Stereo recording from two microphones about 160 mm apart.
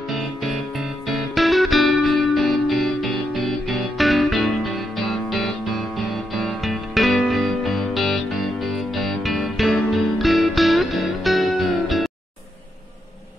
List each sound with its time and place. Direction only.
0.1 s music: centre (ahead or behind)